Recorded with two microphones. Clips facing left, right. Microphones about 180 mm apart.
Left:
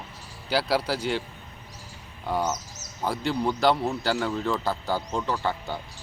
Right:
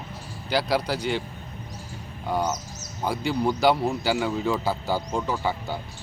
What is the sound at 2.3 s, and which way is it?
Speech, centre (ahead or behind).